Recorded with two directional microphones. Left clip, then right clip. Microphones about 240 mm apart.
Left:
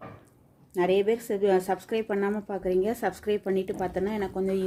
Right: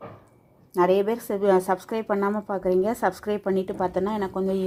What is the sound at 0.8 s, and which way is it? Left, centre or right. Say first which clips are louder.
A woman's voice: right 3 dB; centre.